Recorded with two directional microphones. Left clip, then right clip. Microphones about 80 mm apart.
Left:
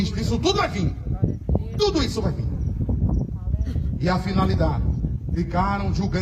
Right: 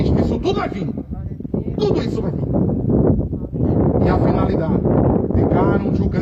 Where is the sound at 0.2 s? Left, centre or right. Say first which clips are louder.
Right 2 dB; right.